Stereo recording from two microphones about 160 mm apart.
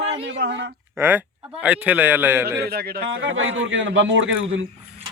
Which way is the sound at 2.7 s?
80° right.